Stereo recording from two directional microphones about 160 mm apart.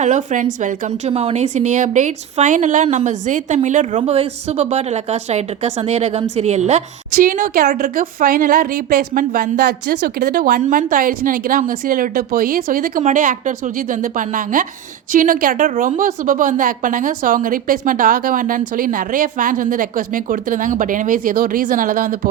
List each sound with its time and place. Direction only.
0.0 s a woman's voice: 50° right (ahead or behind)
7.2 s a woman's voice: 60° right (ahead or behind)